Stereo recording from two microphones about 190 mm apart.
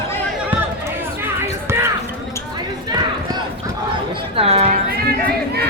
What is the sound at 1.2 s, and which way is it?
Basketball bounce, 15° right (ahead or behind).